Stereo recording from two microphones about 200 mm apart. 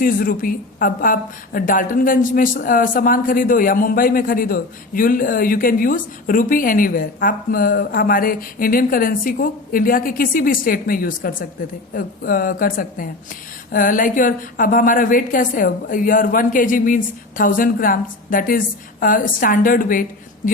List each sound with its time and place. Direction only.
0.0 s a woman's voice: 45° left (ahead or behind)